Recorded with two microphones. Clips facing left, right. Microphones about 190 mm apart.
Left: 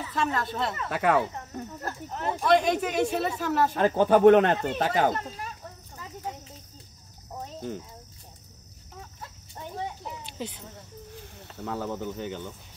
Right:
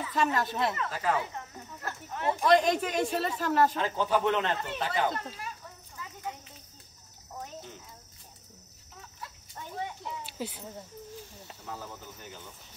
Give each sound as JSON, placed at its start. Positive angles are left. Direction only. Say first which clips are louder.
{"t": 0.1, "sound": "speech", "louder": "even", "side_deg": -5}
{"t": 0.8, "sound": "speech", "louder": "left 6 dB", "side_deg": 65}
{"t": 1.8, "sound": "speech", "louder": "left 3 dB", "side_deg": 40}
{"t": 2.2, "sound": "speech", "louder": "left 1 dB", "side_deg": 0}
{"t": 3.7, "sound": "speech", "louder": "left 7 dB", "side_deg": 55}
{"t": 10.2, "sound": "a sound", "louder": "left 2 dB", "side_deg": -5}
{"t": 11.3, "sound": "speech", "louder": "left 13 dB", "side_deg": 60}